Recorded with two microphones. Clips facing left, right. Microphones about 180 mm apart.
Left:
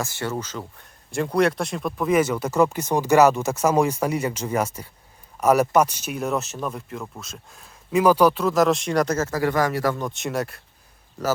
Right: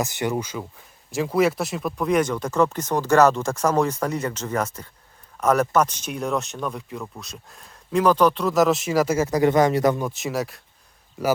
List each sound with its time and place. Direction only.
0.0 s speech: 15° right (ahead or behind)
10.0 s speech: centre (ahead or behind)